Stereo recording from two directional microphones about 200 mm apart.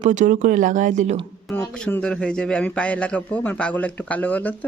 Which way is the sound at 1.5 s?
10° left (ahead or behind).